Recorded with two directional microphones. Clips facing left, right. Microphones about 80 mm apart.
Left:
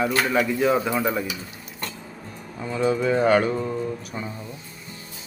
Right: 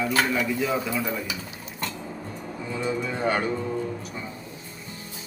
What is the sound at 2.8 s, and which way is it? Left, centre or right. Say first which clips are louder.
Speech: left 7 dB; left.